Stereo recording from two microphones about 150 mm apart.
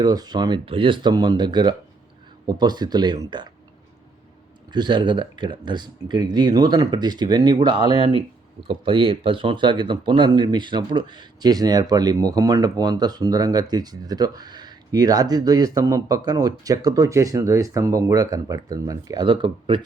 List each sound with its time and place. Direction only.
0.0 s speech: 25° right (ahead or behind)
4.7 s speech: 30° right (ahead or behind)
19.2 s speech: 35° right (ahead or behind)